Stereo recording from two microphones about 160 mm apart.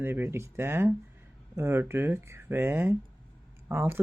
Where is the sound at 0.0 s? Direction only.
15° right (ahead or behind).